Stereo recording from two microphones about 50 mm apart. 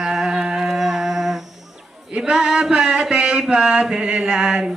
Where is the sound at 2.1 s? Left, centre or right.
Centre.